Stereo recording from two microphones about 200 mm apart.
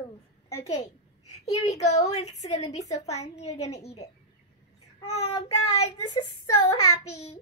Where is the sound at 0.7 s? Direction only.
35° left (ahead or behind).